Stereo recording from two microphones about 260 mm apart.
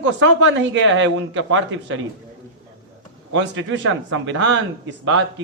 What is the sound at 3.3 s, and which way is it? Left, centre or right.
A man's voice, right.